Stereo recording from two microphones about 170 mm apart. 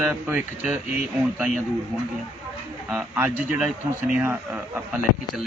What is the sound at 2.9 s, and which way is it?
A man's voice, 10° right (ahead or behind).